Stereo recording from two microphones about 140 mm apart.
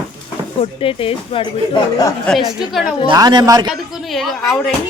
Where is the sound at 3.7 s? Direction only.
Centre (ahead or behind).